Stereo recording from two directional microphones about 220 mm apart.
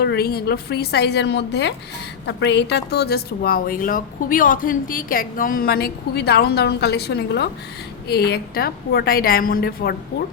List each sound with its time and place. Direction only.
0.0 s speech: 45° left (ahead or behind)